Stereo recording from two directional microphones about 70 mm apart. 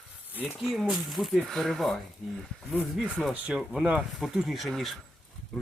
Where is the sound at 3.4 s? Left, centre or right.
Centre.